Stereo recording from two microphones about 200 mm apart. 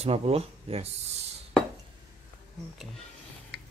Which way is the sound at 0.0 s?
30° right (ahead or behind).